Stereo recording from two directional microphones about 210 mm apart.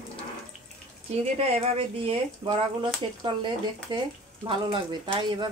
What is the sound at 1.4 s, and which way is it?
Speech, 30° right (ahead or behind).